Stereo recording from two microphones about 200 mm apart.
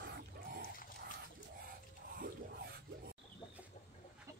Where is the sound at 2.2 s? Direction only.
55° right (ahead or behind).